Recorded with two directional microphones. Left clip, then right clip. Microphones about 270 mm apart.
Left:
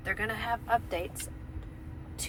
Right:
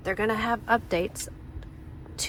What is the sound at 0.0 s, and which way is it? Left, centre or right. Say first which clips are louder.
Speech: right 6 dB; right.